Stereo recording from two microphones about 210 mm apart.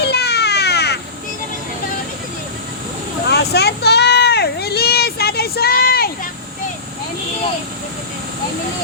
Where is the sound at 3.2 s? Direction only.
50° left (ahead or behind).